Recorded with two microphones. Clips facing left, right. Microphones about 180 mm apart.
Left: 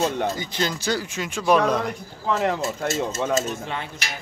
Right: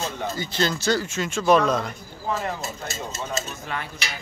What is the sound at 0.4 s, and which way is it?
Speech, 15° left (ahead or behind).